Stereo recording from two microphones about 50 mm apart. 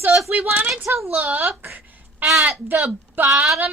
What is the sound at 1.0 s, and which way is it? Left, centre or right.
Speech, right.